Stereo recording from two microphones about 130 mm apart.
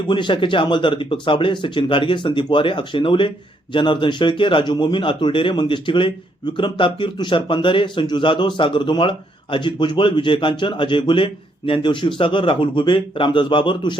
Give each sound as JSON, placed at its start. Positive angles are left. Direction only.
{"t": 0.1, "sound": "speech", "side_deg": 40}